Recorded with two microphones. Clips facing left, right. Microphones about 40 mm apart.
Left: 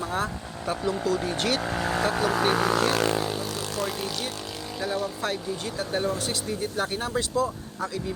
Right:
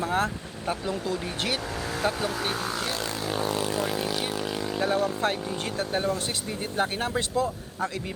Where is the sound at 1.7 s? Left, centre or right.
Left.